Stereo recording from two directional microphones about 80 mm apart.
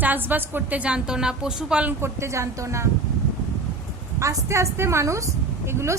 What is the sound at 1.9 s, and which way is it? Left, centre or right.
Speech, right.